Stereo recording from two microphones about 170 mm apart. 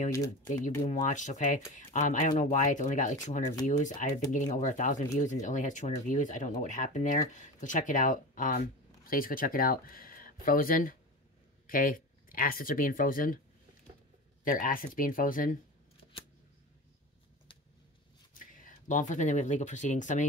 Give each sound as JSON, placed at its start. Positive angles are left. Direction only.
{"t": 0.8, "sound": "speech", "side_deg": 45}
{"t": 14.4, "sound": "speech", "side_deg": 55}
{"t": 18.3, "sound": "speech", "side_deg": 55}